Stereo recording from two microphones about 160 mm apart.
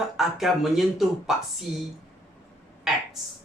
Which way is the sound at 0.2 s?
Centre (ahead or behind).